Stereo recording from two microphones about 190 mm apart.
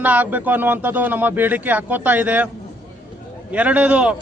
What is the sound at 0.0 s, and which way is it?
A man's voice, 10° right (ahead or behind).